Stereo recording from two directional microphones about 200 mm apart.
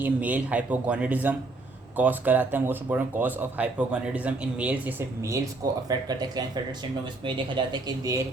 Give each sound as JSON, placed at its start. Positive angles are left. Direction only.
{"t": 0.0, "sound": "speech", "side_deg": -5}